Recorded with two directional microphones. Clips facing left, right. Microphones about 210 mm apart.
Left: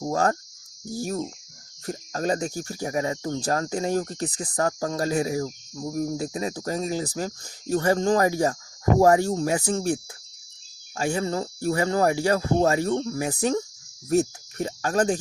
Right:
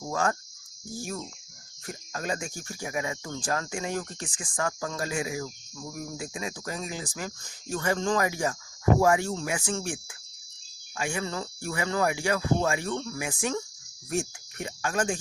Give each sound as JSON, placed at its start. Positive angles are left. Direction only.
{"t": 0.0, "sound": "speech", "side_deg": 40}